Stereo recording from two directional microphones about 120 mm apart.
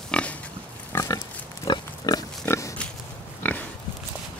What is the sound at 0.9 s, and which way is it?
Pig, 25° left (ahead or behind).